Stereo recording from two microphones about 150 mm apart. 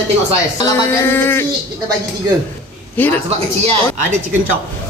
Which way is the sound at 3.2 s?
45° right (ahead or behind).